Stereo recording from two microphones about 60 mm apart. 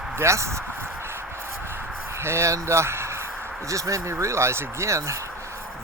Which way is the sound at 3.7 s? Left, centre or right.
Right.